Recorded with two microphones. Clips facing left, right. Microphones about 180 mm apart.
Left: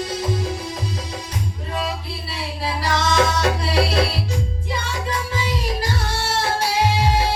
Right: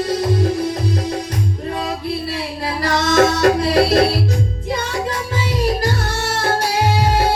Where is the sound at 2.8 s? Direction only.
55° right (ahead or behind).